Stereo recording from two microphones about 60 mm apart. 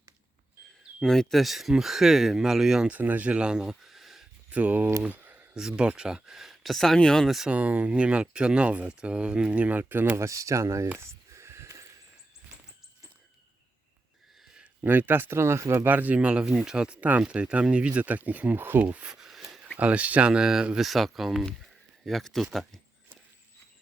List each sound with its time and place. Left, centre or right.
1.0 s speech: centre
2.9 s speech: right; by 4.3 s centre
4.5 s speech: right
5.0 s a sound: right
5.5 s speech: centre
7.3 s speech: centre
7.5 s speech: right
10.2 s speech: right
10.9 s a sound: right
14.8 s speech: right
15.9 s speech: right
19.0 s a sound: centre
19.8 s speech: right; by 22.4 s centre